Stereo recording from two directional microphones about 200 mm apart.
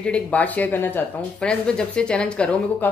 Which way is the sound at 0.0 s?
5° left (ahead or behind).